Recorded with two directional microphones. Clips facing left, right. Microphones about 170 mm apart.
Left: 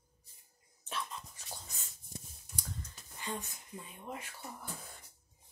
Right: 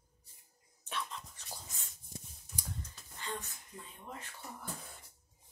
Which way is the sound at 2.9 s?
15° left (ahead or behind).